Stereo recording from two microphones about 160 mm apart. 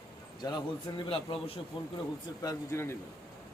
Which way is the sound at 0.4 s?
30° left (ahead or behind).